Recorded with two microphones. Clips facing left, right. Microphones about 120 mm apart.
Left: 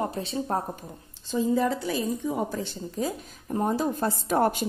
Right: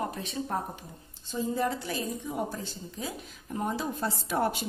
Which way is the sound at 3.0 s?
40° left (ahead or behind).